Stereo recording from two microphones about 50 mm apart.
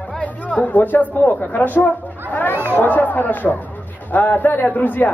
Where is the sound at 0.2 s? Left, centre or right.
Left.